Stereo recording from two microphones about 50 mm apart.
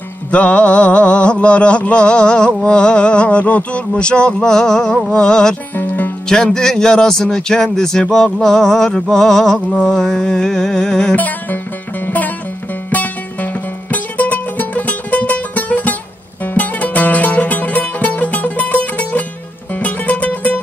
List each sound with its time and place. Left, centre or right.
0.3 s mantra: left
5.1 s speech: centre
5.8 s music: left
6.2 s speech: centre
11.1 s music: left
12.9 s music: left